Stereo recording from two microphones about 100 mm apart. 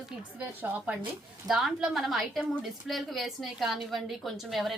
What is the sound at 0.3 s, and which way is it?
Speech, 15° right (ahead or behind).